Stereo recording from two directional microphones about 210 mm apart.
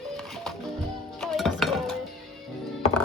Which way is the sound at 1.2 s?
Centre (ahead or behind).